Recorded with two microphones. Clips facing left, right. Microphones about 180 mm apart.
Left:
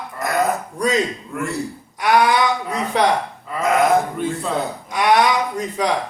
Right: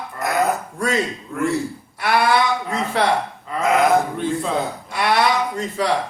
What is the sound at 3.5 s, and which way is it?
Sheep, centre (ahead or behind).